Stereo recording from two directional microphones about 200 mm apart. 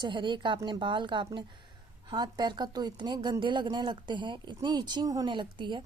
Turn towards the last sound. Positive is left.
turn(degrees=-25)  # may be behind; listen again after turning